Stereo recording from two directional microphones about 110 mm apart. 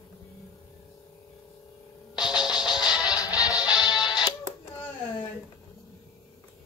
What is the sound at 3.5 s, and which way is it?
Music, 10° right (ahead or behind).